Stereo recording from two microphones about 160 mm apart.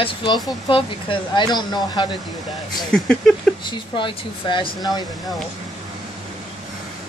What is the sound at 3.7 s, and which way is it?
Speech, 30° left (ahead or behind).